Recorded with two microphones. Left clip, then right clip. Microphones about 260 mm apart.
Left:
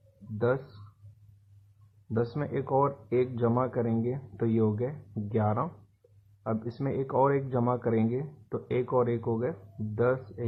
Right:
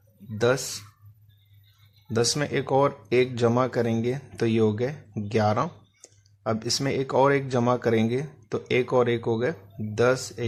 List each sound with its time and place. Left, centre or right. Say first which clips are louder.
0.3 s speech: right 5 dB; right
2.1 s speech: right 7 dB; right